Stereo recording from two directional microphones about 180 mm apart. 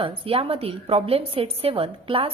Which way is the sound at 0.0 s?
30° right (ahead or behind).